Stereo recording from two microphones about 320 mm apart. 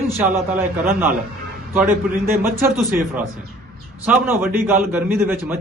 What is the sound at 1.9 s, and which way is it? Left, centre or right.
Speech, right.